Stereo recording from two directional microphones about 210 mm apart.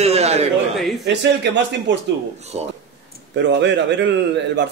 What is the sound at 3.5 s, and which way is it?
Speech, 55° right (ahead or behind).